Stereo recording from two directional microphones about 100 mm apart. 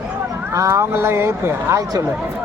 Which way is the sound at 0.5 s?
30° right (ahead or behind).